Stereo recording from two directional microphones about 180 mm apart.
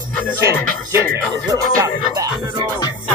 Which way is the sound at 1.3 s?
20° right (ahead or behind).